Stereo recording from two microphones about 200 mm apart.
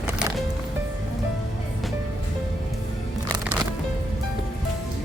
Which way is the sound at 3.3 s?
5° right (ahead or behind).